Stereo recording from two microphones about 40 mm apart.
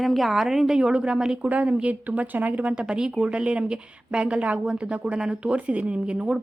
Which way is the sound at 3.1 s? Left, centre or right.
Right.